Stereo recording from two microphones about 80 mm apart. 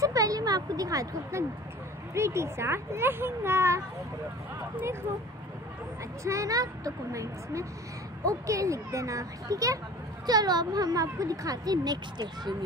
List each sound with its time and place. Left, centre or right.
0.0 s a child's voice: right
2.1 s speech: right
6.2 s a child's voice: right
10.2 s a child's voice: right